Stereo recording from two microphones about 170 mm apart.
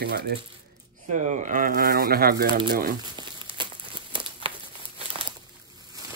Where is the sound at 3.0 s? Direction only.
25° right (ahead or behind).